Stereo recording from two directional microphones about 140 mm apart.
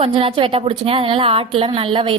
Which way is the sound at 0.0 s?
40° right (ahead or behind).